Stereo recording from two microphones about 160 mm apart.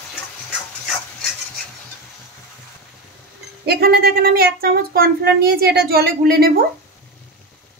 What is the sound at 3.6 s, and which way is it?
Speech, 80° right.